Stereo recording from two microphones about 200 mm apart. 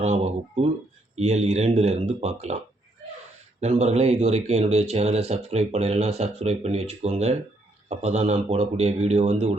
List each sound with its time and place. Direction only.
0.0 s a sound: 35° right (ahead or behind)
1.1 s speech: 35° right (ahead or behind)
3.6 s speech: 35° right (ahead or behind)